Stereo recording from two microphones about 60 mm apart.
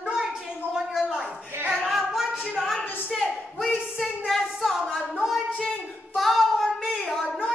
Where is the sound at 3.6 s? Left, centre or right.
Centre.